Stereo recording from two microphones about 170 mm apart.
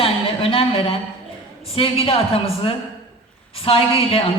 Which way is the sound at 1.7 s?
35° left (ahead or behind).